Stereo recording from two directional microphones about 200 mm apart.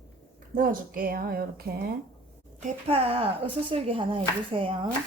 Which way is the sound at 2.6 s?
35° right (ahead or behind).